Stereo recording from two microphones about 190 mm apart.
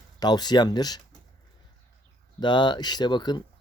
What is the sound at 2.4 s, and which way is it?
Speech, 25° left (ahead or behind).